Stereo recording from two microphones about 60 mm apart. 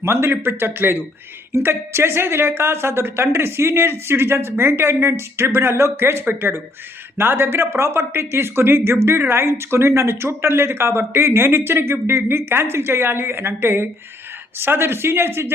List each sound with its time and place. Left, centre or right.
0.0 s a woman's voice: right